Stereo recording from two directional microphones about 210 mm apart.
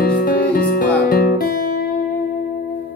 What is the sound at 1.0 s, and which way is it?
Guitar, 45° left (ahead or behind).